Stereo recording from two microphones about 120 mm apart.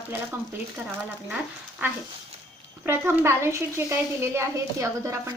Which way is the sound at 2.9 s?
20° right (ahead or behind).